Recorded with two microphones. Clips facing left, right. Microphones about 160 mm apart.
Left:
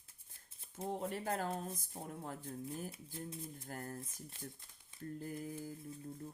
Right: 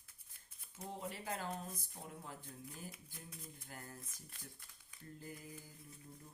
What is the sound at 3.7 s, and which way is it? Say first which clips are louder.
Speech: left 7 dB; 50° left (ahead or behind).